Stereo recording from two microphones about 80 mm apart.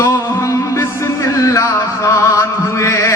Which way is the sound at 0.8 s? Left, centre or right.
Left.